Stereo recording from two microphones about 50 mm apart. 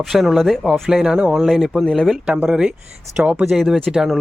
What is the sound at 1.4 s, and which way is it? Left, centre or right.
Speech, centre.